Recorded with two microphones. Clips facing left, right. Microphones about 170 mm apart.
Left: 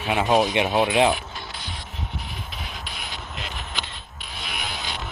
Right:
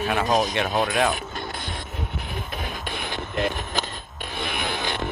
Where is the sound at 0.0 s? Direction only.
15° left (ahead or behind).